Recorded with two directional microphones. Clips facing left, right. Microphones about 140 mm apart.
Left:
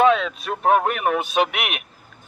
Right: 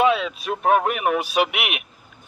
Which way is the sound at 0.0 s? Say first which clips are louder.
Left 2 dB; 40° left (ahead or behind).